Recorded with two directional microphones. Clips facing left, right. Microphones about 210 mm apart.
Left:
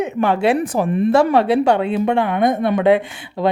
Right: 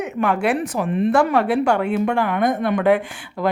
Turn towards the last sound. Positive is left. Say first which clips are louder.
# left 3 dB
turn(degrees=20)  # may be behind; listen again after turning